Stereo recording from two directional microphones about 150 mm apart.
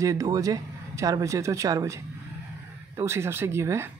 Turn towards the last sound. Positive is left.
turn(degrees=-20)  # may be behind; listen again after turning